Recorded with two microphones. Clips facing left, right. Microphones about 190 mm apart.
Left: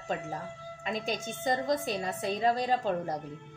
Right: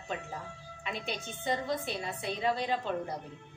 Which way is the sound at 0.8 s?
40° left (ahead or behind).